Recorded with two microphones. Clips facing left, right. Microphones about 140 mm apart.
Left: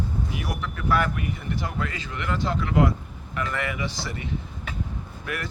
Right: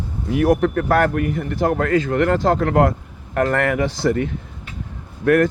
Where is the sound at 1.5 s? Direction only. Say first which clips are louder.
Right 13 dB; 60° right (ahead or behind).